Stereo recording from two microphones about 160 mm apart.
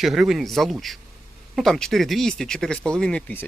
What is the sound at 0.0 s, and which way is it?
Speech, centre (ahead or behind).